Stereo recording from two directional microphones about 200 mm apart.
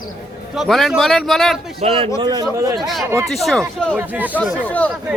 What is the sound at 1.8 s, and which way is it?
Speech, 35° right (ahead or behind).